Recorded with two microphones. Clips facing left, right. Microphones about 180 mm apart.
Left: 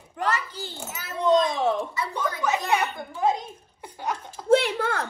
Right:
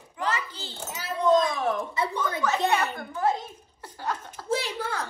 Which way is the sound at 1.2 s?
20° left (ahead or behind).